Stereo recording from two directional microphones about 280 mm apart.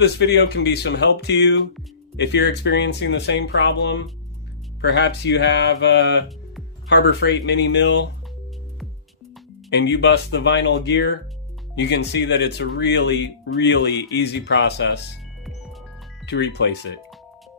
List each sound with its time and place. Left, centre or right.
0.0 s speech: left
9.7 s speech: left
16.3 s speech: left